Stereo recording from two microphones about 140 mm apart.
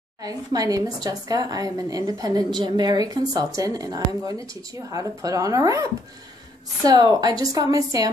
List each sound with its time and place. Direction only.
0.2 s speech: 25° right (ahead or behind)